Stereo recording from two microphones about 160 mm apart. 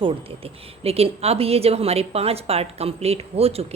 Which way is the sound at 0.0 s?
35° right (ahead or behind).